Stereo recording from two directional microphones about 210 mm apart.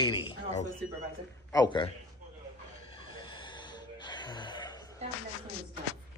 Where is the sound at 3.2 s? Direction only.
20° left (ahead or behind).